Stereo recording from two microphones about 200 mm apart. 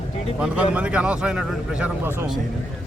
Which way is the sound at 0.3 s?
5° right (ahead or behind).